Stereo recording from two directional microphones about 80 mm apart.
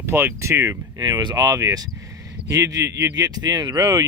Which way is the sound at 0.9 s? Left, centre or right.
Right.